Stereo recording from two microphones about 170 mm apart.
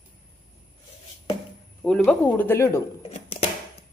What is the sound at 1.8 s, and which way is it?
Speech, 5° left (ahead or behind).